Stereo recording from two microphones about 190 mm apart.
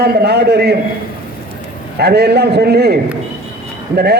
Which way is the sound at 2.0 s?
60° right (ahead or behind).